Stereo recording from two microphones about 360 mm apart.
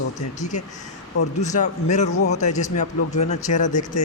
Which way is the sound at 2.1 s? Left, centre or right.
Left.